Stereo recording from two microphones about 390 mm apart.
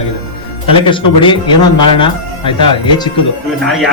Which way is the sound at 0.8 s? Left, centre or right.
Centre.